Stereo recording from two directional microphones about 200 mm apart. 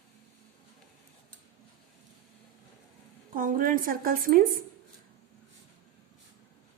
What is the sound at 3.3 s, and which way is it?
A woman's voice, 45° right (ahead or behind).